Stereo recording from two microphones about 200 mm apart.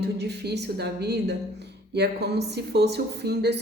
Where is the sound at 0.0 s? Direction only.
55° right (ahead or behind).